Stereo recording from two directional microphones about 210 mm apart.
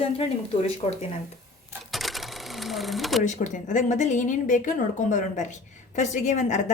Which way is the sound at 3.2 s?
35° left (ahead or behind).